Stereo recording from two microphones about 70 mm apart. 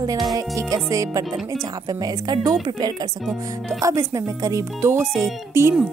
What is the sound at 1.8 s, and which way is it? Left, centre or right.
A woman's voice, right.